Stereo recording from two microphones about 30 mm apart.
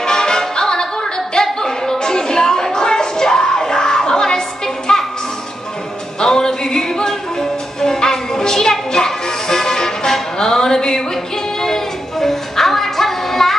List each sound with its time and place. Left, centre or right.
0.0 s music: left
6.2 s music: centre